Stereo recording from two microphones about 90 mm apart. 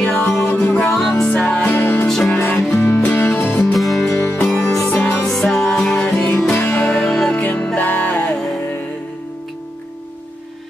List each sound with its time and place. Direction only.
0.0 s music: 15° left (ahead or behind)
0.3 s music: 30° left (ahead or behind)
0.9 s music: 5° left (ahead or behind)
1.3 s music: 15° left (ahead or behind)
2.0 s music: 5° left (ahead or behind)
2.3 s music: 20° left (ahead or behind)
3.7 s music: centre (ahead or behind)
4.2 s music: 25° left (ahead or behind)
5.2 s music: 5° left (ahead or behind)
6.5 s music: 20° left (ahead or behind)